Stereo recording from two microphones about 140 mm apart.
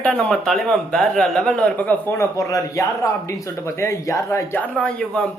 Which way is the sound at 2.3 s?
25° left (ahead or behind).